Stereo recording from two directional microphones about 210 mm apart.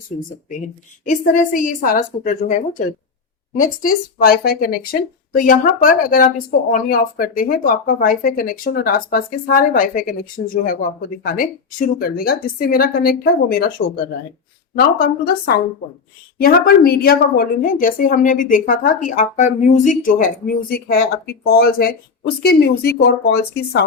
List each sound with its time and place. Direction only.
0.1 s speech: 40° left (ahead or behind)